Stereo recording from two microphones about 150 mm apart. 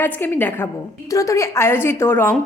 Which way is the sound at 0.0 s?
15° left (ahead or behind).